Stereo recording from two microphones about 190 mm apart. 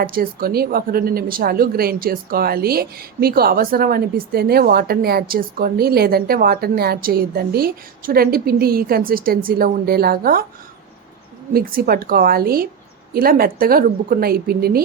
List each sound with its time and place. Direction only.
0.0 s a woman's voice: 50° right (ahead or behind)
11.5 s a woman's voice: 50° right (ahead or behind)